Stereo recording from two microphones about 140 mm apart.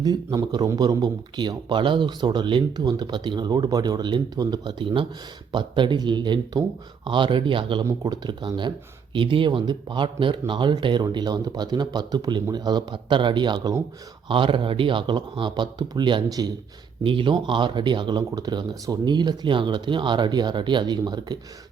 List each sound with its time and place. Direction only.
0.0 s a man's voice: 30° right (ahead or behind)